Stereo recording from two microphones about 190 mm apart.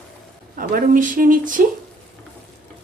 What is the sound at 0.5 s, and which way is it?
A woman's voice, 45° right (ahead or behind).